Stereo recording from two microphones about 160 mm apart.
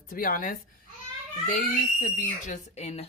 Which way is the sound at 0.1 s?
60° left (ahead or behind).